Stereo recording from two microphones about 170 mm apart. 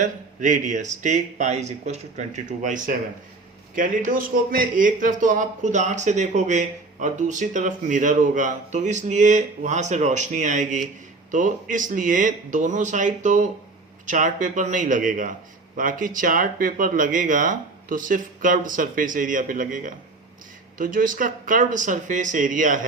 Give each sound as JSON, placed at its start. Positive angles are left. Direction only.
{"t": 0.0, "sound": "a man's voice", "side_deg": -45}